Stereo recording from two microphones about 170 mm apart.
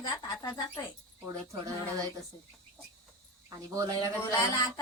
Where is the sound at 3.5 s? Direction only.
20° right (ahead or behind).